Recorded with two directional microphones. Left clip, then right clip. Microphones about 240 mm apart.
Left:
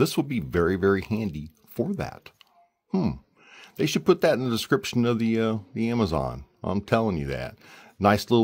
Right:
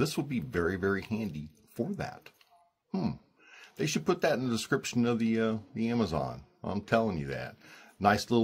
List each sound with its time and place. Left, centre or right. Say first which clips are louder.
0.0 s speech: left 7 dB; left